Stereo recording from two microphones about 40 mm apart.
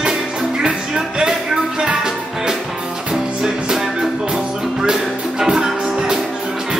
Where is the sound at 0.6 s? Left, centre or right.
Centre.